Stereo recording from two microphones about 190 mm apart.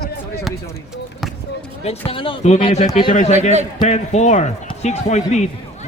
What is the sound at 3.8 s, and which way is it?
Speech, 35° left (ahead or behind).